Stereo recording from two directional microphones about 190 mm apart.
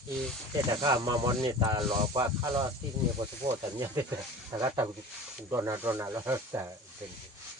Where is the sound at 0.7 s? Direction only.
20° right (ahead or behind).